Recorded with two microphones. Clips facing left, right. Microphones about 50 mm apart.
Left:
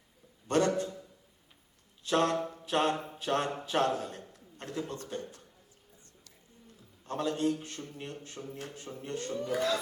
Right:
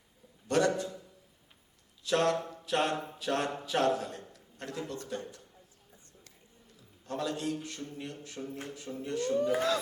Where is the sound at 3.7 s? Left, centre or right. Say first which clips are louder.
Right 1 dB; left.